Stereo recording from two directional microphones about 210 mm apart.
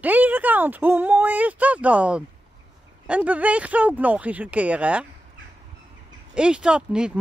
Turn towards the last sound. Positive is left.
turn(degrees=-5)  # may be behind; listen again after turning